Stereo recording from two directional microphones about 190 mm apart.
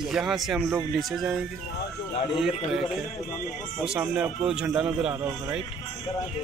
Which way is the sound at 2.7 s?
Centre (ahead or behind).